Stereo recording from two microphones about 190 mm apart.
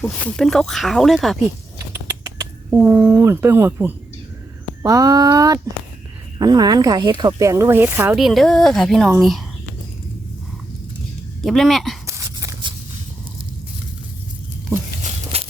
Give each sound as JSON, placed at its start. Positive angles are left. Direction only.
{"t": 0.0, "sound": "speech", "side_deg": 5}
{"t": 1.9, "sound": "vehicle", "side_deg": -15}
{"t": 2.6, "sound": "speech", "side_deg": -10}
{"t": 11.4, "sound": "speech", "side_deg": 0}
{"t": 12.0, "sound": "a sound", "side_deg": -15}
{"t": 15.0, "sound": "a sound", "side_deg": -30}